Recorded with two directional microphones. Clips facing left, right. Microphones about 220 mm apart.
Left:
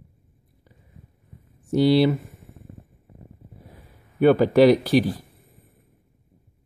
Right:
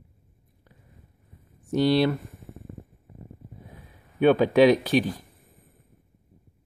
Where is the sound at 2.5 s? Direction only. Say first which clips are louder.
Right 4 dB; 80° right.